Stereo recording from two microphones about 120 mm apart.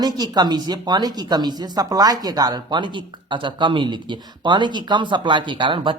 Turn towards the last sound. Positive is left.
turn(degrees=-45)  # may be behind; listen again after turning